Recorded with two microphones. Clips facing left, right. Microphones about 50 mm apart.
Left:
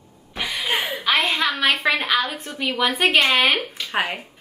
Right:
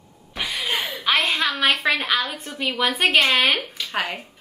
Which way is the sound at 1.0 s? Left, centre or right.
Centre.